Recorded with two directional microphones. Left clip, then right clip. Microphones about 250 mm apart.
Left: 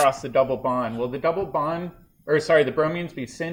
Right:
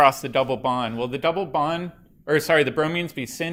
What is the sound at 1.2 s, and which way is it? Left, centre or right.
Speech, right.